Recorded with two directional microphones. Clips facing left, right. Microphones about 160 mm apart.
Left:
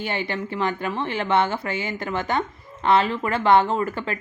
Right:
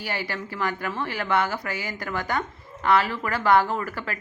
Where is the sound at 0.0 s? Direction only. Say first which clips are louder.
Left 4 dB; 20° left (ahead or behind).